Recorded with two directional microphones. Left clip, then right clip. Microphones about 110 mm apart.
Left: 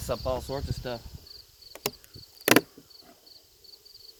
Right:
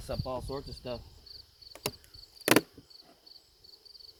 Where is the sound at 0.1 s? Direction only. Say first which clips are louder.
Left 6 dB; 30° left (ahead or behind).